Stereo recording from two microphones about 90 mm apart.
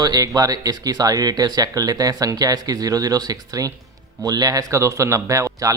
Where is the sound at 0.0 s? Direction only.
45° right (ahead or behind).